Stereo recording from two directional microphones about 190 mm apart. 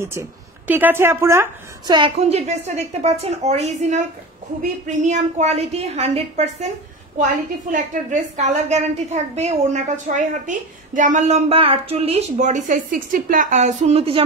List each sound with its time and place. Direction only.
0.0 s speech: 15° right (ahead or behind)
2.1 s a woman's voice: 35° right (ahead or behind)
7.7 s a woman's voice: 40° right (ahead or behind)